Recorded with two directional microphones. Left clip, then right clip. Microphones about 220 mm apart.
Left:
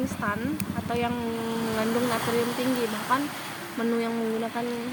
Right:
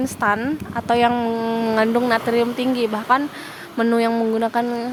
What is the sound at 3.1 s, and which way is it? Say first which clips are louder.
Speech: right 9 dB; 50° right (ahead or behind).